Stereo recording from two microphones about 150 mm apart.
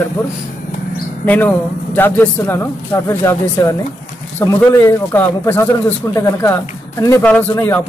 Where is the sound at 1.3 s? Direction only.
15° left (ahead or behind).